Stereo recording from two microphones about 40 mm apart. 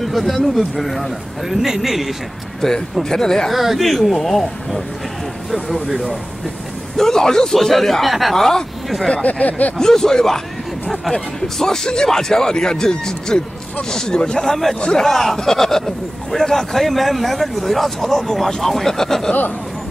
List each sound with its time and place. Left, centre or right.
0.0 s a man's voice: centre
2.6 s a man's voice: centre
3.5 s a man's voice: centre
7.0 s a man's voice: centre
9.1 s speech: left
9.8 s a man's voice: centre
14.8 s a man's voice: centre
15.0 s a man's voice: centre